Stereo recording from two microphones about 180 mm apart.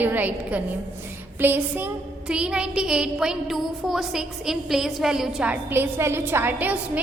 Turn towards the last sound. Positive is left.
turn(degrees=-10)  # may be behind; listen again after turning